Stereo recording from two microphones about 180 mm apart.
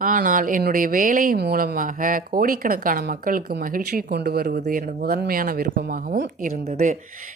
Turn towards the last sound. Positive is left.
turn(degrees=-45)  # may be behind; listen again after turning